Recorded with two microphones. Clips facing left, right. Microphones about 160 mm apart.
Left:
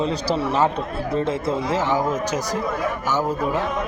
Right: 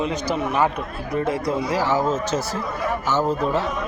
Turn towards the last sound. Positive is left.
turn(degrees=10)  # may be behind; listen again after turning